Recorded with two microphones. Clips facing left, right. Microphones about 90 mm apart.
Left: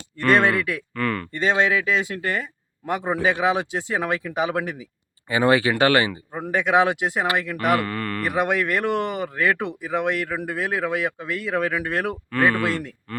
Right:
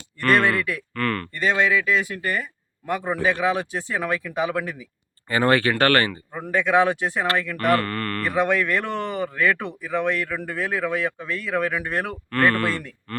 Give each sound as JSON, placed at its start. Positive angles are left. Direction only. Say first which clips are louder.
{"t": 0.2, "sound": "speech", "louder": "left 1 dB", "side_deg": 20}
{"t": 0.9, "sound": "speech", "louder": "even", "side_deg": 10}
{"t": 1.3, "sound": "speech", "louder": "left 1 dB", "side_deg": 25}
{"t": 5.3, "sound": "speech", "louder": "left 1 dB", "side_deg": 10}